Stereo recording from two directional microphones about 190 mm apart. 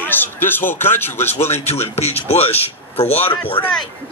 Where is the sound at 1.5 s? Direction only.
35° left (ahead or behind).